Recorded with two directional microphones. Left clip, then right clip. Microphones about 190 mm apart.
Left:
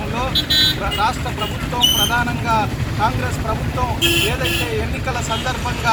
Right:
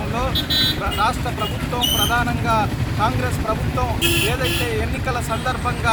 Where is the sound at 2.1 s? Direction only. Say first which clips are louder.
Left 1 dB; 10° right (ahead or behind).